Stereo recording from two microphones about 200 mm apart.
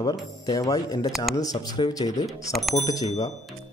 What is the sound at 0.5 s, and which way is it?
Speech, 15° left (ahead or behind).